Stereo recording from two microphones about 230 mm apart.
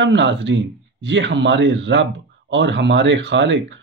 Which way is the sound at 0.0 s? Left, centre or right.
Right.